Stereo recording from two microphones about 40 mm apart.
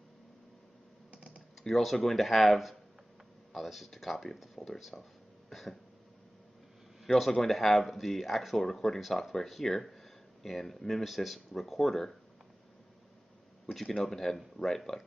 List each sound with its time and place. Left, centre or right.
1.1 s typing: right
2.0 s speech: centre
5.5 s throat clearing: centre
7.1 s speech: centre
13.7 s speech: centre